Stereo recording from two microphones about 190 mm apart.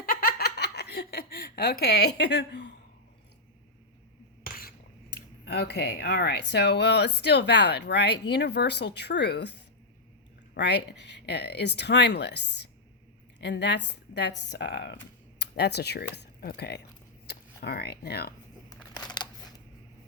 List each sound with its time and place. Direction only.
0.0 s giggle: 50° left (ahead or behind); by 2.7 s 65° left (ahead or behind)
5.1 s speech: 60° left (ahead or behind)
18.7 s a sound: 20° left (ahead or behind)